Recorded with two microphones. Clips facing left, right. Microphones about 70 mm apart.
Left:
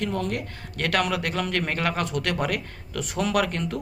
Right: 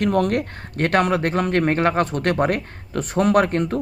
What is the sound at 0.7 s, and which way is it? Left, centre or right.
Speech, right.